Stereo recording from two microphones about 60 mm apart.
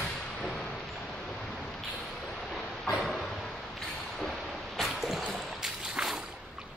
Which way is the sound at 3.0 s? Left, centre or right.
Centre.